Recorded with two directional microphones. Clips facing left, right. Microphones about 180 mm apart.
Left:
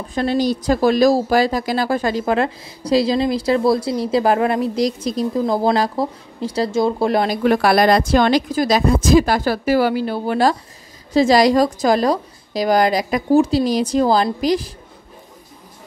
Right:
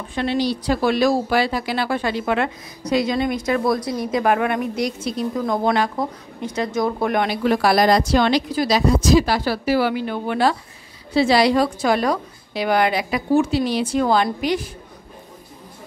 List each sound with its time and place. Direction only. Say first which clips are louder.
0.1 s speech: left 3 dB; 40° left (ahead or behind)
7.4 s a woman's voice: left 2 dB; 55° left (ahead or behind); by 14.7 s 35° left (ahead or behind)